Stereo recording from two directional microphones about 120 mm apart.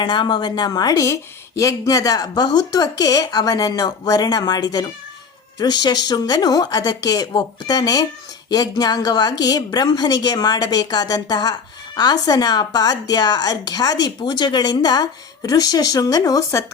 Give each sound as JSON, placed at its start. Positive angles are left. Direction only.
{"t": 0.0, "sound": "speech", "side_deg": 40}